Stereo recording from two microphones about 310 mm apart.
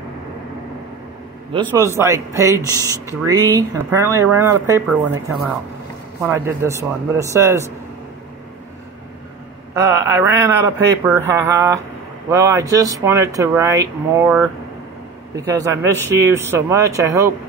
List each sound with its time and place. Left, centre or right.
1.5 s speech: centre
6.2 s speech: centre
9.8 s speech: centre